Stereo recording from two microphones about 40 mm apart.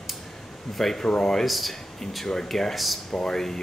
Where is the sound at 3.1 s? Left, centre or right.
Centre.